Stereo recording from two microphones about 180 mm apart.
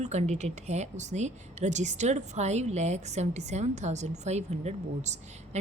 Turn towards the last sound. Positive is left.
turn(degrees=-40)  # may be behind; listen again after turning